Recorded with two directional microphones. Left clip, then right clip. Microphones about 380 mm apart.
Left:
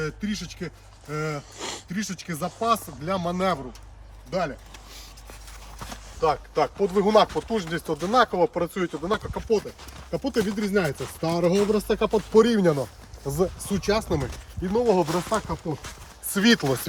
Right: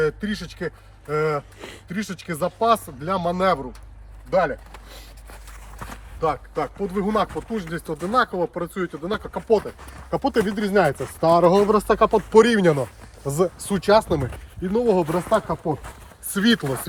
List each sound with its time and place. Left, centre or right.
0.0 s speech: centre
1.5 s speech: centre
1.9 s speech: centre
5.8 s a sound: centre
6.3 s speech: left; by 9.7 s centre
10.1 s speech: right
10.4 s speech: centre
12.7 s speech: right
13.6 s speech: centre
16.3 s speech: centre